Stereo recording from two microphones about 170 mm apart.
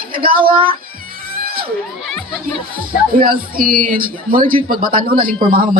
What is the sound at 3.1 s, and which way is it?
Speech, 60° right (ahead or behind).